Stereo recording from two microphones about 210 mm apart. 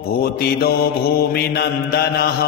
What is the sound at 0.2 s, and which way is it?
Mantra, 50° left (ahead or behind).